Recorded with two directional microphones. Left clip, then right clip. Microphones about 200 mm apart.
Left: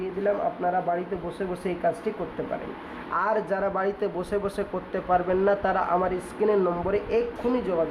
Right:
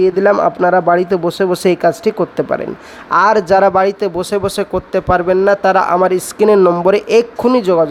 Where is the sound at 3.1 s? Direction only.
45° right (ahead or behind).